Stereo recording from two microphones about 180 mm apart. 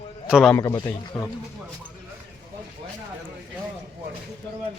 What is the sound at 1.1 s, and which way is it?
Speech, 5° left (ahead or behind).